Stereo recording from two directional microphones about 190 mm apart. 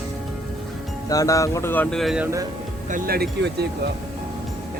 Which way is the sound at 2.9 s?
50° right (ahead or behind).